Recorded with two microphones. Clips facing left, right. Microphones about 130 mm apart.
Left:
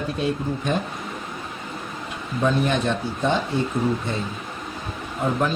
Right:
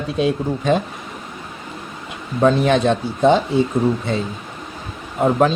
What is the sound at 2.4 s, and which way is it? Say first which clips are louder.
Speech: right 7 dB; 90° right.